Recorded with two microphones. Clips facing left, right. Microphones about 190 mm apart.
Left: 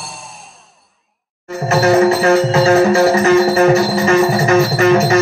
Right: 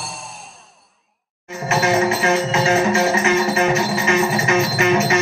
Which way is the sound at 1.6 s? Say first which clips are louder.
Left 7 dB; 35° left (ahead or behind).